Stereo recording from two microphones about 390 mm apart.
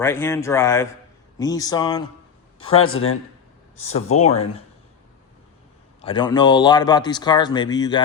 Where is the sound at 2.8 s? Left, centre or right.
Left.